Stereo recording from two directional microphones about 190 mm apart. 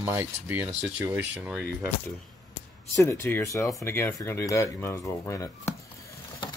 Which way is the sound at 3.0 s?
15° left (ahead or behind).